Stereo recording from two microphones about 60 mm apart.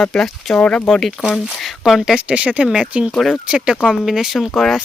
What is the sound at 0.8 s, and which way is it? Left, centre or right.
Speech, centre.